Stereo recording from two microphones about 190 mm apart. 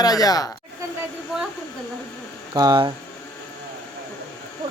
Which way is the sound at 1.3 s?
Centre (ahead or behind).